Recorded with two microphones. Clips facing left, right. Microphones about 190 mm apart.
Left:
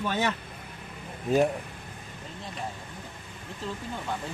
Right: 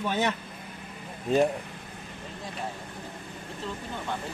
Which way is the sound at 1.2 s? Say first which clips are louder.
Even; 5° left (ahead or behind).